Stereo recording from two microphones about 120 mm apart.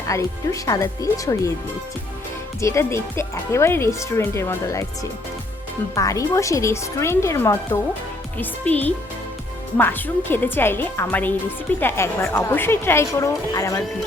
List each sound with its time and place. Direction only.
0.1 s a woman's voice: 25° left (ahead or behind)
2.6 s a woman's voice: 25° left (ahead or behind)
5.9 s a woman's voice: 25° left (ahead or behind)